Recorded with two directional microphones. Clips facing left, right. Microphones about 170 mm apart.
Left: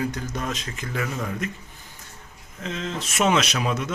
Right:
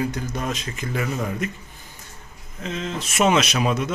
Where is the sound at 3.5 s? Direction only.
20° right (ahead or behind).